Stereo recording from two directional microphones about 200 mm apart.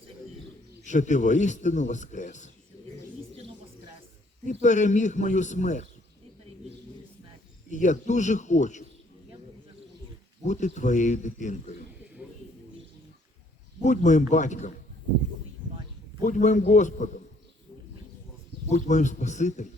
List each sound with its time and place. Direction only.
0.9 s a man's voice: 35° left (ahead or behind)
4.4 s a man's voice: 35° left (ahead or behind)
7.7 s a man's voice: 40° left (ahead or behind)
10.4 s a man's voice: 35° left (ahead or behind)
13.8 s a man's voice: 35° left (ahead or behind)
16.2 s a man's voice: 40° left (ahead or behind)
18.7 s a man's voice: 35° left (ahead or behind)